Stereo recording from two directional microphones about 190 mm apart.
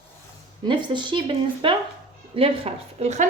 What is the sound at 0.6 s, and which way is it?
A woman's voice, 25° right (ahead or behind).